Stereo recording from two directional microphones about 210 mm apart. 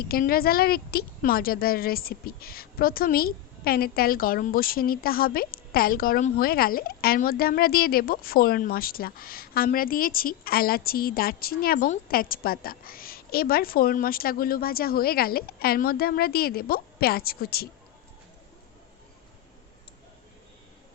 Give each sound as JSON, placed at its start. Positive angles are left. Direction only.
{"t": 0.0, "sound": "a woman's voice", "side_deg": 45}